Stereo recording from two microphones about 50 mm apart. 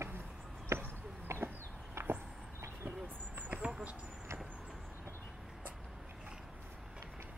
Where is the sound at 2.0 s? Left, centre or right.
Right.